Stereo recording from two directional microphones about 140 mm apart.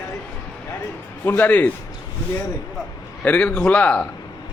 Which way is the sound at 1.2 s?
15° left (ahead or behind).